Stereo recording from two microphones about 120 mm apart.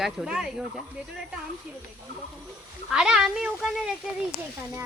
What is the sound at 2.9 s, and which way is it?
Speech, 5° right (ahead or behind).